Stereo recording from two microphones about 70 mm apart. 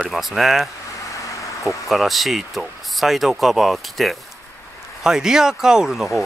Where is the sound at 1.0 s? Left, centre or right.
Left.